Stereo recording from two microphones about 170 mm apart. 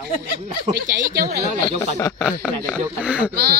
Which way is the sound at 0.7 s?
70° right (ahead or behind).